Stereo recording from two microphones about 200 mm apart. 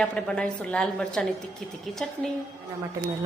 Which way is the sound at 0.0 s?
5° left (ahead or behind).